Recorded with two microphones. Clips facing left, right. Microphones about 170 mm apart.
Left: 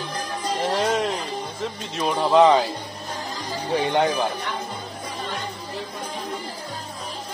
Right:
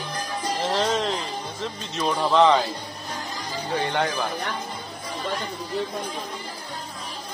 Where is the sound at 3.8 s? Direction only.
20° left (ahead or behind).